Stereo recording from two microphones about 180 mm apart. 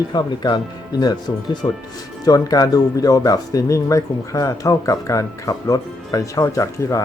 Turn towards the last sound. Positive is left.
turn(degrees=15)  # may be behind; listen again after turning